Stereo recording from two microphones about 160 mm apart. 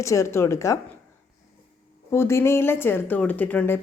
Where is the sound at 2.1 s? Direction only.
15° left (ahead or behind).